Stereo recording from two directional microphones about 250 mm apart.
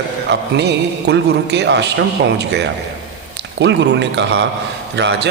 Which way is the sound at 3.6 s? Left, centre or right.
Right.